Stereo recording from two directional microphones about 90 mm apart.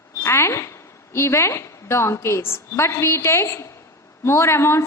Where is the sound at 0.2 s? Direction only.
30° left (ahead or behind).